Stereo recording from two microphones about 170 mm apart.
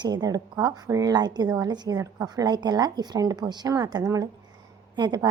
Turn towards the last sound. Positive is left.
turn(degrees=-25)  # may be behind; listen again after turning